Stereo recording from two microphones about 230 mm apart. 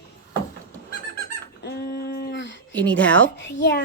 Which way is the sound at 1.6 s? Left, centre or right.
Left.